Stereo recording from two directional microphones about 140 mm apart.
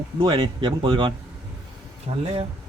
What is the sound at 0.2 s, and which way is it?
Speech, 35° right (ahead or behind).